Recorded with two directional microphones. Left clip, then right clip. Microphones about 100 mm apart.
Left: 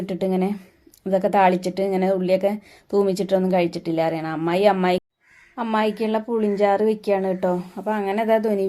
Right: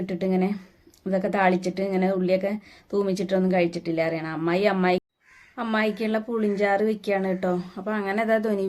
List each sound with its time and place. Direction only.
0.0 s a woman's voice: 40° left (ahead or behind)
5.5 s speech: 25° left (ahead or behind)